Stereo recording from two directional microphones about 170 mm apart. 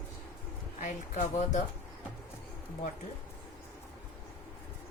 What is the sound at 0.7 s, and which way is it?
Speech, 45° left (ahead or behind).